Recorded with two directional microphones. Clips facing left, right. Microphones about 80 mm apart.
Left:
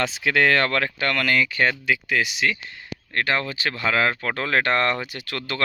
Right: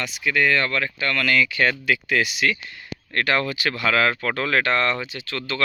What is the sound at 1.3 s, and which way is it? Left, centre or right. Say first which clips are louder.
Speech: right 2 dB; left.